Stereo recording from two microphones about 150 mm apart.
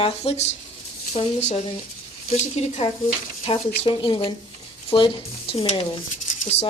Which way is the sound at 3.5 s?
35° left (ahead or behind).